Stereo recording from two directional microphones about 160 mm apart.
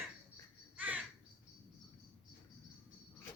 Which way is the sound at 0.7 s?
10° right (ahead or behind).